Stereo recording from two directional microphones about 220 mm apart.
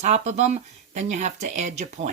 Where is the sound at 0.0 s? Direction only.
30° right (ahead or behind).